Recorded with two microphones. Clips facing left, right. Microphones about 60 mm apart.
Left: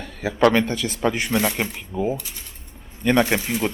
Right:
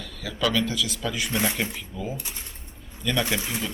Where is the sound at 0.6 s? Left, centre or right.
Left.